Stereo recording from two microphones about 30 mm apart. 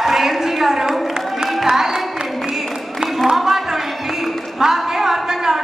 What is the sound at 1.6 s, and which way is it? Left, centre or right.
Music, centre.